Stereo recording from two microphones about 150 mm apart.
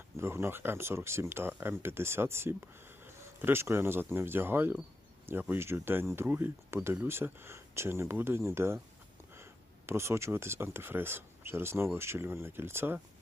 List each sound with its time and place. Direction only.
0.2 s speech: 15° right (ahead or behind)